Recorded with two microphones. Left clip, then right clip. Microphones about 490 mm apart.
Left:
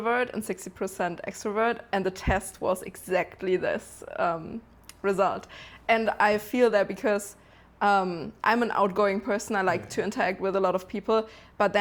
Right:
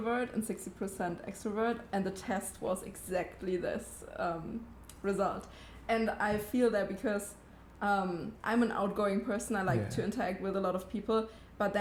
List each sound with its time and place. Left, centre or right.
0.0 s speech: left